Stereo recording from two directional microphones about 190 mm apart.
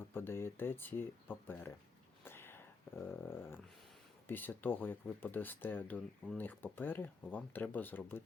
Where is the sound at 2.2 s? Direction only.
10° left (ahead or behind).